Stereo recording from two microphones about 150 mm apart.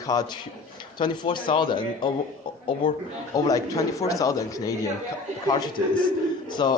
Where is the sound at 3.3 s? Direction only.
25° left (ahead or behind).